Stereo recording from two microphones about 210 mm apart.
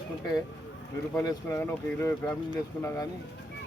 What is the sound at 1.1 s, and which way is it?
Speech, 15° left (ahead or behind).